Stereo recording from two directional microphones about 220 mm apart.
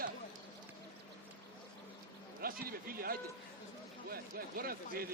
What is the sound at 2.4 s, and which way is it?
A man's voice, 40° right (ahead or behind).